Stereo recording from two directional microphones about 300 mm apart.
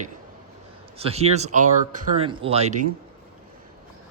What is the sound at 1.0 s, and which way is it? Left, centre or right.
Speech, centre.